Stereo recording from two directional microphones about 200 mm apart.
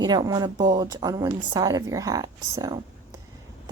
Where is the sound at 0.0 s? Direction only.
20° right (ahead or behind).